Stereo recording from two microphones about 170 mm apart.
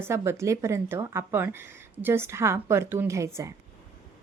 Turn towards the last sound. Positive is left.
turn(degrees=-15)  # may be behind; listen again after turning